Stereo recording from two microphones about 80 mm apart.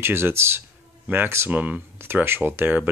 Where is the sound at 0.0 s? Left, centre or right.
Right.